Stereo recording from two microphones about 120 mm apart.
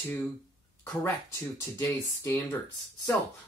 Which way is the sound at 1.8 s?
20° left (ahead or behind).